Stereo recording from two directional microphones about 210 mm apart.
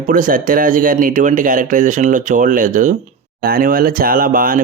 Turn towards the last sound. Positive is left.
turn(degrees=-40)  # may be behind; listen again after turning